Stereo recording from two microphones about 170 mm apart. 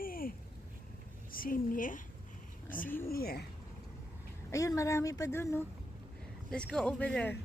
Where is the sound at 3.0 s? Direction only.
65° left (ahead or behind).